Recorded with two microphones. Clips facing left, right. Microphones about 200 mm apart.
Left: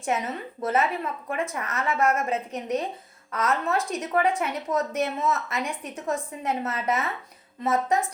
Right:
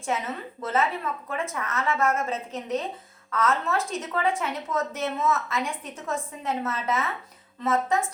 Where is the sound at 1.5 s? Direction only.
20° left (ahead or behind).